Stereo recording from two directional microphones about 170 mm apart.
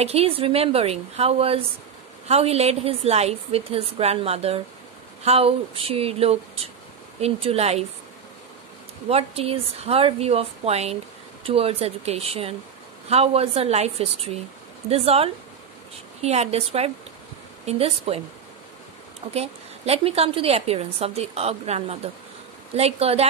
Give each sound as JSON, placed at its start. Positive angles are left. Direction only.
{"t": 0.0, "sound": "a woman's voice", "side_deg": -35}
{"t": 9.1, "sound": "a woman's voice", "side_deg": -35}
{"t": 19.3, "sound": "a woman's voice", "side_deg": -35}